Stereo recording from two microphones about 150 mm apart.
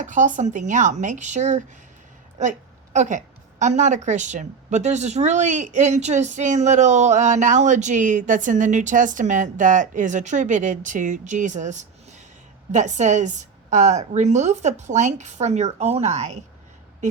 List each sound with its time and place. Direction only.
0.0 s a woman's voice: 55° right (ahead or behind)